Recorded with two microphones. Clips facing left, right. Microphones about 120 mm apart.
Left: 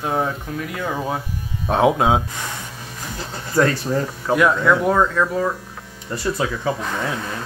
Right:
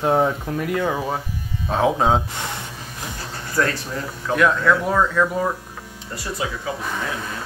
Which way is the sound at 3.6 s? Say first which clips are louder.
Left 4 dB; 25° left (ahead or behind).